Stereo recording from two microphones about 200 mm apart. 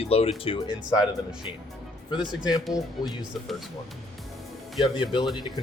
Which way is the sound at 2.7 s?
20° left (ahead or behind).